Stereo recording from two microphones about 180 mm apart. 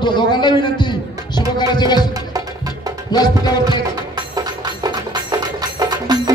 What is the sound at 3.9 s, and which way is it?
Music, 20° right (ahead or behind).